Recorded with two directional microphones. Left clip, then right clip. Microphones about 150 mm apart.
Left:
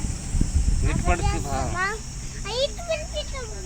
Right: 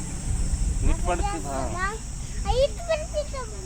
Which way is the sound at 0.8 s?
Centre (ahead or behind).